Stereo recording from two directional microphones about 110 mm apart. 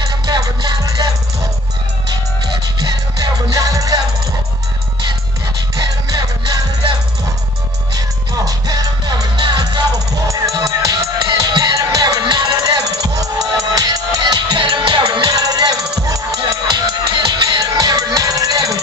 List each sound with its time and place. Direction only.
0.0 s music: 35° right (ahead or behind)
2.8 s music: 35° right (ahead or behind)
5.8 s music: 35° right (ahead or behind)
7.9 s music: 35° right (ahead or behind)
14.3 s music: 45° right (ahead or behind)
16.6 s music: 45° right (ahead or behind)